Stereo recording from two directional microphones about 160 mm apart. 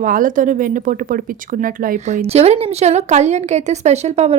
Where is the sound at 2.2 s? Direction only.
40° right (ahead or behind).